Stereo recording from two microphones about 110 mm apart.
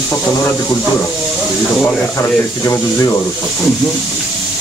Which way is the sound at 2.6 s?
25° left (ahead or behind).